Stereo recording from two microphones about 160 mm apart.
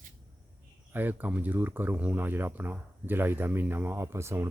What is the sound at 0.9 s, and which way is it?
Speech, 10° right (ahead or behind).